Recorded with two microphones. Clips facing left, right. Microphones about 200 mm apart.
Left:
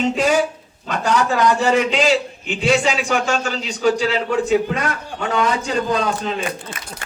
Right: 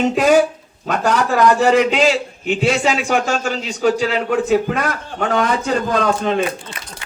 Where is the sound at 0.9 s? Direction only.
55° right (ahead or behind).